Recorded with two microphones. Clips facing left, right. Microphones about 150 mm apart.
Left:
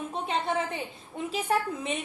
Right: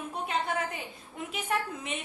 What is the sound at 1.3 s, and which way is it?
Speech, 30° left (ahead or behind).